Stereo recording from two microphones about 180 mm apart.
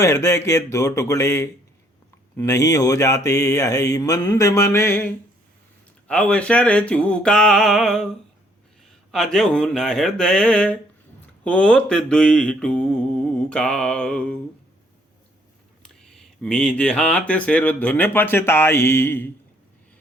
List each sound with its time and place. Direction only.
0.0 s speech: 15° left (ahead or behind)
9.1 s mantra: 5° left (ahead or behind)
15.8 s speech: 5° left (ahead or behind)